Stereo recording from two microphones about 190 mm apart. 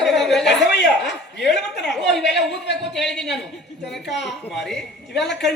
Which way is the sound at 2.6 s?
65° left (ahead or behind).